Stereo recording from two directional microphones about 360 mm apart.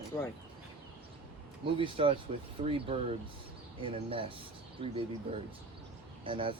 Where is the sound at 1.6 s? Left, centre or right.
Centre.